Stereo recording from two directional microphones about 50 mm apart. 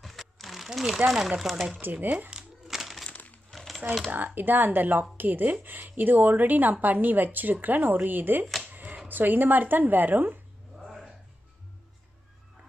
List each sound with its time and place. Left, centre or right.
0.0 s crumpling: centre
1.4 s speech: centre
1.8 s a woman's voice: right
2.3 s crumpling: centre
3.1 s a sound: left
3.5 s crumpling: centre
4.1 s a woman's voice: right
10.8 s a sound: centre